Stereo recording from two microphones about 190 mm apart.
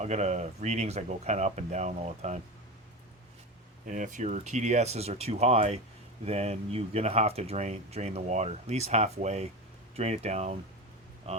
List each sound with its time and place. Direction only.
0.0 s speech: 35° right (ahead or behind)
3.8 s speech: 45° right (ahead or behind)